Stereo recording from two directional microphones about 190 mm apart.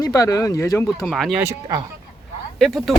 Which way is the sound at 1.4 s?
20° right (ahead or behind).